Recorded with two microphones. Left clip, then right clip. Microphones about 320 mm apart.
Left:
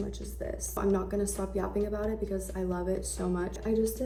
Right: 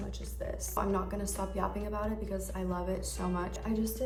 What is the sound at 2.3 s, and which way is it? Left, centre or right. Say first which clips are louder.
Speech: left 3 dB; right.